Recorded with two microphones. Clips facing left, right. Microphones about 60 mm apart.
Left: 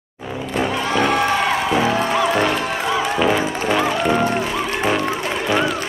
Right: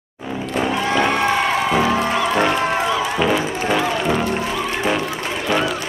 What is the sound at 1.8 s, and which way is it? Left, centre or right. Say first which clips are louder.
Music: even; centre.